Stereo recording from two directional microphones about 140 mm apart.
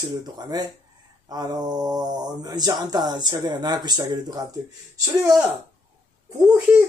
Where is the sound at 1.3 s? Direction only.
30° right (ahead or behind).